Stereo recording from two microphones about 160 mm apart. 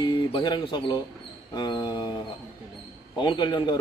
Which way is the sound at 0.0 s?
30° left (ahead or behind).